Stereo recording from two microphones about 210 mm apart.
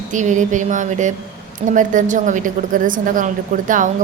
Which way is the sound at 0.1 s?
35° right (ahead or behind).